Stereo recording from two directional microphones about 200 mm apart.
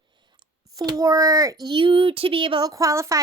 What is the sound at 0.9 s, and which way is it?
A woman's voice, 15° right (ahead or behind).